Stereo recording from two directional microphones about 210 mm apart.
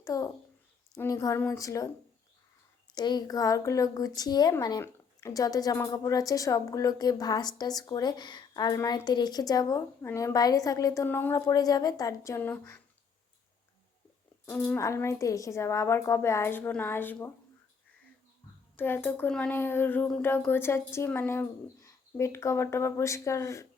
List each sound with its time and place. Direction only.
0.0 s speech: 15° left (ahead or behind)
2.9 s speech: 20° left (ahead or behind)
14.4 s speech: 5° left (ahead or behind)
18.8 s speech: 10° left (ahead or behind)